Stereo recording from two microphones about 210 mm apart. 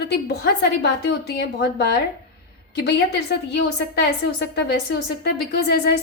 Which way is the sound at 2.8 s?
55° left (ahead or behind).